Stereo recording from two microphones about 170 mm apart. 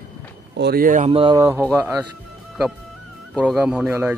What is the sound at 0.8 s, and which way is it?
Speech, 50° right (ahead or behind).